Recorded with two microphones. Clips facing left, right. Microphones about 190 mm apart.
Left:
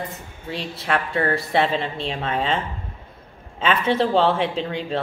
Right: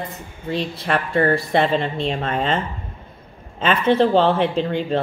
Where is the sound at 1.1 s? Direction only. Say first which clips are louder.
Right 6 dB; 40° right (ahead or behind).